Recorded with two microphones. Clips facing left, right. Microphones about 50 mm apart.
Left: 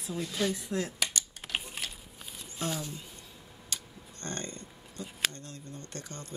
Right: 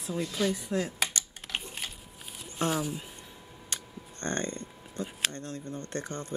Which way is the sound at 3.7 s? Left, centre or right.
Right.